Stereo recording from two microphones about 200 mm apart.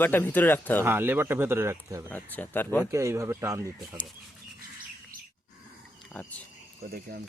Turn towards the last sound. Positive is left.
turn(degrees=5)  # may be behind; listen again after turning